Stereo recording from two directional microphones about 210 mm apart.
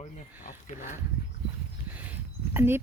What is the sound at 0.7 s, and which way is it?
Speech, 35° left (ahead or behind).